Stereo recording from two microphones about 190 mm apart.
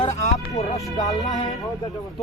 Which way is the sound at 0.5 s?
20° left (ahead or behind).